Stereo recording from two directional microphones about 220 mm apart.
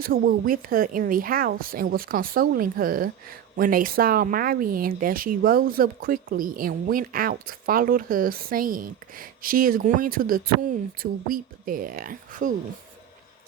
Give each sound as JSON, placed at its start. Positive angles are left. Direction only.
{"t": 0.0, "sound": "speech", "side_deg": -40}